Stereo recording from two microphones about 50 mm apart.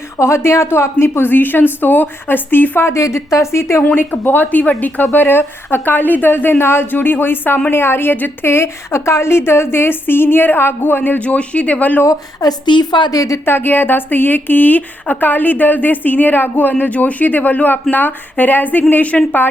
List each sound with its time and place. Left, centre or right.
0.2 s a woman's voice: left
2.8 s a woman's voice: left
3.9 s a woman's voice: left
8.4 s a woman's voice: left
11.2 s a woman's voice: left
13.4 s a woman's voice: left